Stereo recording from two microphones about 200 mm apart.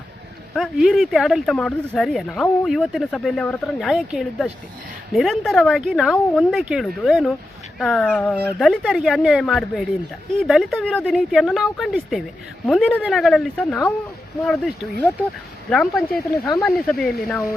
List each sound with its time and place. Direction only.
0.5 s speech: centre (ahead or behind)
15.7 s speech: centre (ahead or behind)